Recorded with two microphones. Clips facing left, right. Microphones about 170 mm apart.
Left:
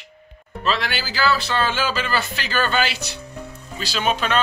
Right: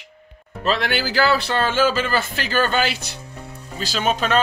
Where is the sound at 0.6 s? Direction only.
50° right (ahead or behind).